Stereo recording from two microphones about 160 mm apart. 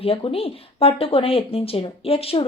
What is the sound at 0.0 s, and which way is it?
Speech, 35° left (ahead or behind).